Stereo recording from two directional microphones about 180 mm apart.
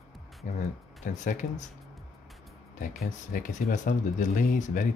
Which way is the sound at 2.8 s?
45° left (ahead or behind).